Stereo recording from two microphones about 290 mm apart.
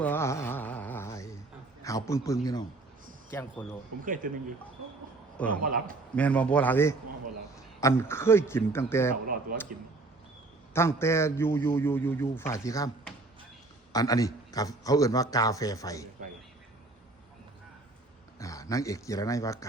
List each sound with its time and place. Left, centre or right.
0.0 s a sound: centre
1.8 s a man's voice: centre
4.0 s a man's voice: right
5.6 s a man's voice: right
6.1 s a man's voice: centre
9.2 s speech: right
10.8 s a man's voice: centre
18.3 s speech: centre